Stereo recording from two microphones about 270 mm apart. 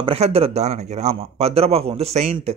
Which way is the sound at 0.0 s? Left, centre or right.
Right.